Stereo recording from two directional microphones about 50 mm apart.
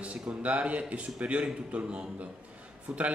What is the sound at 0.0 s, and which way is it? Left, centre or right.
Speech, right.